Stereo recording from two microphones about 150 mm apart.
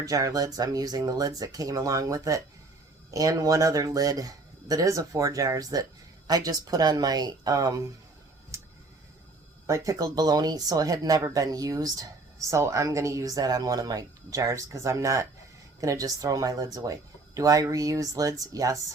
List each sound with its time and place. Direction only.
0.0 s speech: 20° right (ahead or behind)
9.6 s speech: 20° right (ahead or behind)